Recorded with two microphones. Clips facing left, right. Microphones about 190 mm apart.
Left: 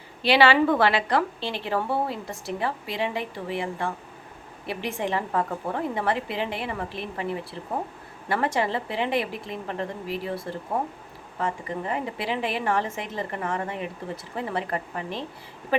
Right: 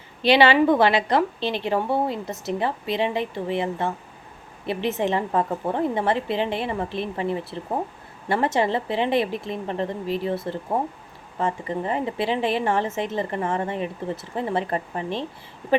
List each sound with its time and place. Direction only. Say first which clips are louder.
0.2 s a woman's voice: right 2 dB; 20° right (ahead or behind)